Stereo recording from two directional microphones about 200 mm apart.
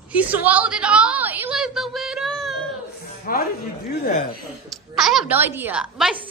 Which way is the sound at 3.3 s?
45° left (ahead or behind).